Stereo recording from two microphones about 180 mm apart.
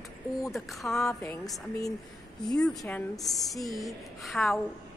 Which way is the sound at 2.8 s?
10° left (ahead or behind).